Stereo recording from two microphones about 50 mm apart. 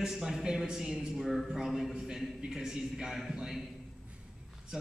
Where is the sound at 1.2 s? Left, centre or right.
Centre.